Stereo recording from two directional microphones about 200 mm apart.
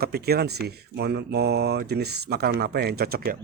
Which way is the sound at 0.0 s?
50° right (ahead or behind).